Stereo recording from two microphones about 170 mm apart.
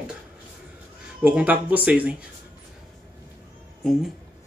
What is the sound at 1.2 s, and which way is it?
Speech, 10° right (ahead or behind).